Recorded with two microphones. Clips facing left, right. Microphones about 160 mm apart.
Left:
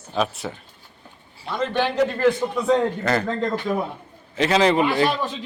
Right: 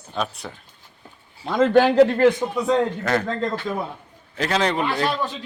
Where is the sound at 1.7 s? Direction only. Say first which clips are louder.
Right 7 dB; 35° right (ahead or behind).